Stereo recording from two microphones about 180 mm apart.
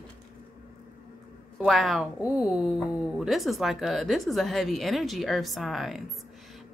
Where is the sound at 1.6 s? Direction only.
Centre (ahead or behind).